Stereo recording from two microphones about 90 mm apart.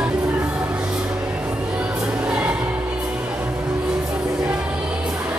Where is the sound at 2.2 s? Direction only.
10° right (ahead or behind).